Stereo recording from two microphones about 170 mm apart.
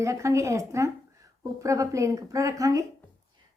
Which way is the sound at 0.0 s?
20° right (ahead or behind).